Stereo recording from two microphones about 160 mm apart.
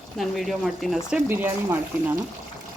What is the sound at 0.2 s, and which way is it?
Speech, centre (ahead or behind).